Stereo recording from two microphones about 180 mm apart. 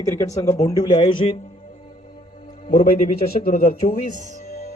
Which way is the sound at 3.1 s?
45° left (ahead or behind).